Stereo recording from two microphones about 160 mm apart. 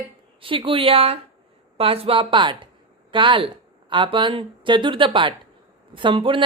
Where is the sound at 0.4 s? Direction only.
35° right (ahead or behind).